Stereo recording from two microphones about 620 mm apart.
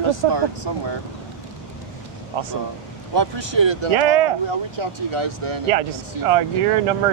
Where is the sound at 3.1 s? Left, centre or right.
Right.